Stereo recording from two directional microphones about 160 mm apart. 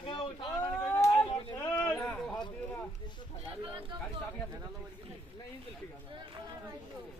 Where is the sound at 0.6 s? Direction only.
15° left (ahead or behind).